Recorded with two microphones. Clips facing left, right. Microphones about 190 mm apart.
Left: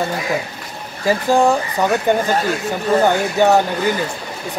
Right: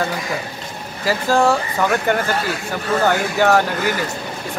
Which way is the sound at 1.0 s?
15° left (ahead or behind).